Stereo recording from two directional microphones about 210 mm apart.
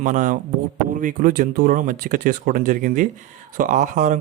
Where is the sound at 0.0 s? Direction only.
35° right (ahead or behind).